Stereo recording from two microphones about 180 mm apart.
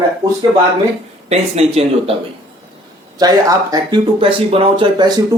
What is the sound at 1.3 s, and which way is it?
Speech, 35° right (ahead or behind).